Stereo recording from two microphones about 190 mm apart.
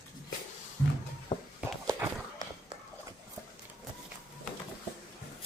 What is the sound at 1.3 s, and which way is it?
Walk, 25° left (ahead or behind).